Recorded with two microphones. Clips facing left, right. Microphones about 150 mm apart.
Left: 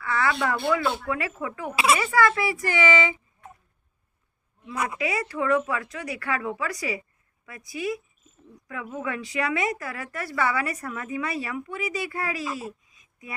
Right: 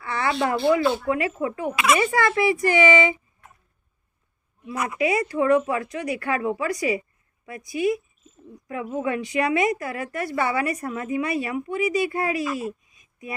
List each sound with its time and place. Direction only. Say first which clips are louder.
0.0 s a sound: even; 25° right (ahead or behind)
0.3 s speech: right 5 dB; 25° right (ahead or behind)
1.7 s speech: even; 30° left (ahead or behind)
2.1 s a child's voice: right 2 dB; 20° right (ahead or behind)
4.9 s speech: right 10 dB; 20° right (ahead or behind)
12.5 s a sound: right 6 dB; 20° right (ahead or behind)